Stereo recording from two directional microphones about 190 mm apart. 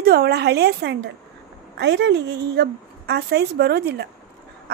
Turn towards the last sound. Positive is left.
turn(degrees=-60)  # may be behind; listen again after turning